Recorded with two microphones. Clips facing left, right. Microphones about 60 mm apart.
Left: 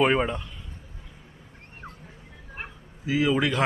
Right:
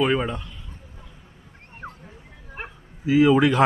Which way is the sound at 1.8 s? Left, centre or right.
Right.